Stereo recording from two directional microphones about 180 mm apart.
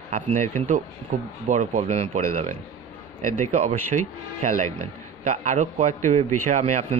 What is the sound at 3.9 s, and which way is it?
Speech, 40° right (ahead or behind).